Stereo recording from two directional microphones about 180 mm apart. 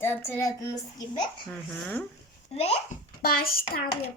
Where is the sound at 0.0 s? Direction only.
10° left (ahead or behind).